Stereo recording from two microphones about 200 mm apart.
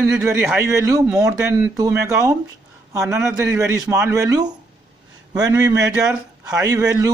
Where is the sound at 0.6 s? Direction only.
15° right (ahead or behind).